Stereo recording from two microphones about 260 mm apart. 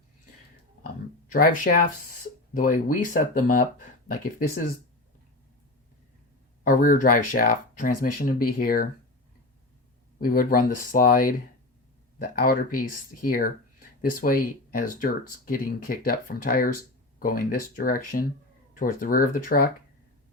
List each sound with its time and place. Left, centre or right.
1.3 s speech: left
6.7 s speech: left
10.2 s speech: left